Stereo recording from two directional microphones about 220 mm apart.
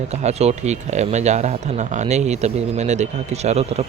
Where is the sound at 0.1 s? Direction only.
30° right (ahead or behind).